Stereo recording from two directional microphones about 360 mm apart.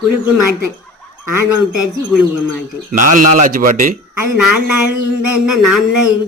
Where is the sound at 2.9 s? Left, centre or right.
Right.